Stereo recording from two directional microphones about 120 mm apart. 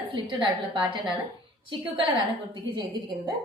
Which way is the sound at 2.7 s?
40° right (ahead or behind).